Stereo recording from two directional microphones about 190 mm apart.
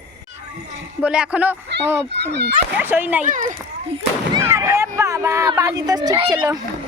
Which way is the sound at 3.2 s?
40° right (ahead or behind).